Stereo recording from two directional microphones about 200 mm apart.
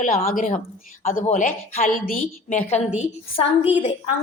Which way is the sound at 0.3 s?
45° left (ahead or behind).